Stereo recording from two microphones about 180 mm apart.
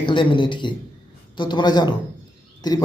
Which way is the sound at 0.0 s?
25° left (ahead or behind).